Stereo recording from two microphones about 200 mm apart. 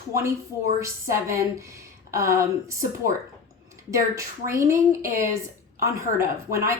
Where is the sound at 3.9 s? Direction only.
15° right (ahead or behind).